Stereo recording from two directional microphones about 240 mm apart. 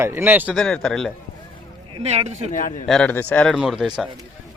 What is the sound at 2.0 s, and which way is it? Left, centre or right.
Speech, right.